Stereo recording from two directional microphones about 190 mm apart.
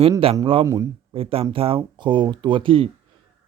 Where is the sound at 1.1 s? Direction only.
30° right (ahead or behind).